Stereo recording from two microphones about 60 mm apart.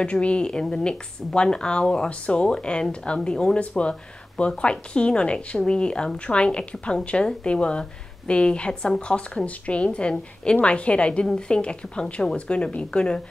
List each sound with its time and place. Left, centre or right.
0.0 s a woman's voice: centre